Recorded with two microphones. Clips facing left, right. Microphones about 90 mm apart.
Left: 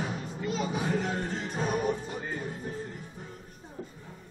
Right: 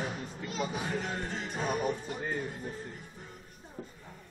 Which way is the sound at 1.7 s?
25° left (ahead or behind).